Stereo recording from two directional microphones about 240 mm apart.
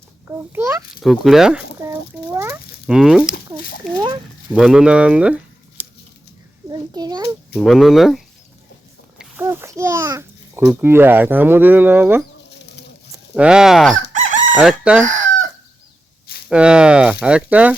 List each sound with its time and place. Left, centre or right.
0.3 s a child's voice: centre
1.0 s a sound: centre
3.3 s a sound: left
3.9 s a sound: centre
4.5 s speech: centre
6.7 s children playing: centre
7.5 s a child's voice: centre
12.5 s bird: left
13.3 s speech: centre
14.1 s chicken: right
14.5 s speech: centre
16.5 s speech: centre